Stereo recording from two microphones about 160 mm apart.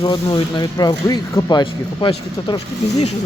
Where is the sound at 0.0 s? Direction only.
30° left (ahead or behind).